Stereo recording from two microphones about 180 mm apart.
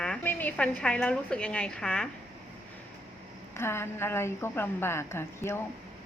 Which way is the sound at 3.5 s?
15° left (ahead or behind).